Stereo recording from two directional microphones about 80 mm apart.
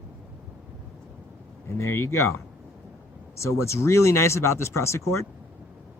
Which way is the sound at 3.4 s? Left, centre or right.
Left.